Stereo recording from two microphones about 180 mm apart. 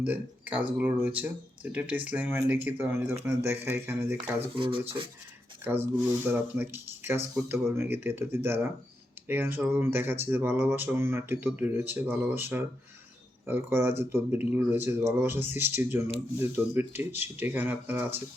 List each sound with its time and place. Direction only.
0.0 s speech: 10° right (ahead or behind)
4.4 s speech: 30° right (ahead or behind)
5.6 s speech: 10° right (ahead or behind)